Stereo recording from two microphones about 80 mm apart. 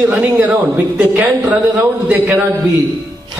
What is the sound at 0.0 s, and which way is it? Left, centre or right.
A woman's voice, centre.